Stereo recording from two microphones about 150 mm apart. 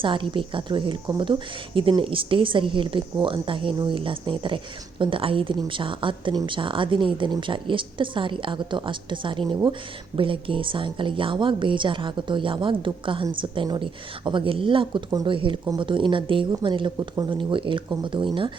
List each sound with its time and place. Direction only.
0.0 s a woman's voice: 35° right (ahead or behind)